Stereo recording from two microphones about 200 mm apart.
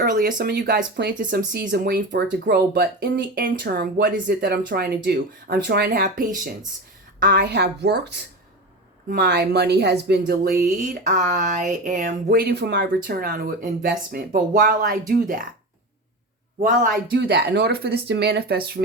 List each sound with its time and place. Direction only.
0.0 s a woman's voice: 45° right (ahead or behind)
16.6 s speech: 45° right (ahead or behind)
17.2 s speech: 55° right (ahead or behind)